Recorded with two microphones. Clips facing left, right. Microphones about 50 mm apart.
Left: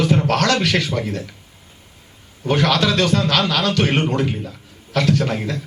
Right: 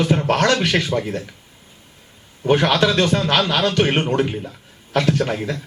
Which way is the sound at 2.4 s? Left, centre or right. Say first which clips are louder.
Right 2 dB; right.